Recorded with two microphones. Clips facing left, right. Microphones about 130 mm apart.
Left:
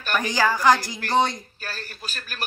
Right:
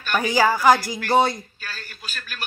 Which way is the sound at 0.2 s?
10° right (ahead or behind).